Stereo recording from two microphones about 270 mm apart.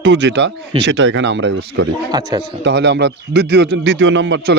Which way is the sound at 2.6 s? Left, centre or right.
Right.